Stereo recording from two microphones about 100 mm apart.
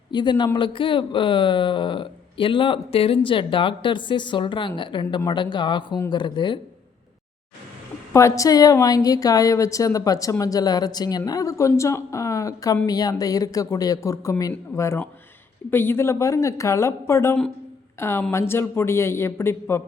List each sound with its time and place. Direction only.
0.1 s speech: 50° left (ahead or behind)
8.1 s speech: 30° left (ahead or behind)